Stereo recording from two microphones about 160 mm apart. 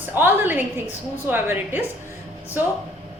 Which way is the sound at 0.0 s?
15° right (ahead or behind).